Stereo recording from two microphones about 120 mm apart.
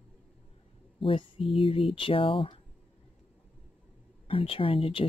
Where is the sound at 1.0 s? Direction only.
50° left (ahead or behind).